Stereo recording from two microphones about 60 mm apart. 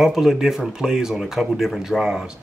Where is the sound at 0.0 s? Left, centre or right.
Centre.